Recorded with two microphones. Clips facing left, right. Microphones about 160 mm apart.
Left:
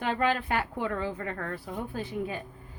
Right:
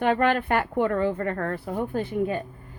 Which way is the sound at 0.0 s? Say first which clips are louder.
Right 6 dB; 60° right (ahead or behind).